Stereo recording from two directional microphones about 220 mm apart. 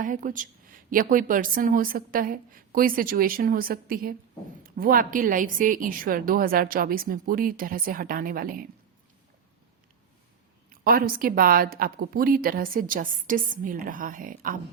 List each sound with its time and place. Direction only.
0.0 s speech: 35° right (ahead or behind)
10.7 s speech: 40° right (ahead or behind)